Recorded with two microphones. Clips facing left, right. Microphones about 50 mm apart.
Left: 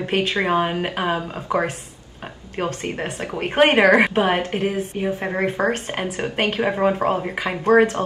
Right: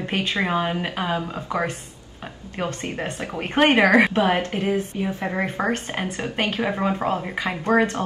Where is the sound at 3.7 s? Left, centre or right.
Left.